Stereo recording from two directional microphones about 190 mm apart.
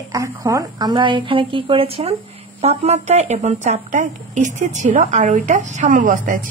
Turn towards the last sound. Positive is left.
turn(degrees=-45)  # may be behind; listen again after turning